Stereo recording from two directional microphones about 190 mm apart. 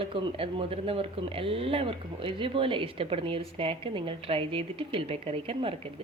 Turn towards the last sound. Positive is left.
turn(degrees=-30)  # may be behind; listen again after turning